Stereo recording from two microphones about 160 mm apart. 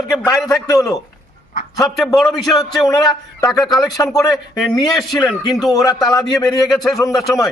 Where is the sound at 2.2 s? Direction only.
Centre (ahead or behind).